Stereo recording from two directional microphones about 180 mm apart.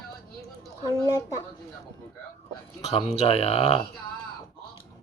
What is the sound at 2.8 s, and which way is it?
Speech, 35° left (ahead or behind).